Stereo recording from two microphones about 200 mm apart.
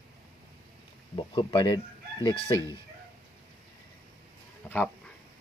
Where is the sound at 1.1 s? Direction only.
25° left (ahead or behind).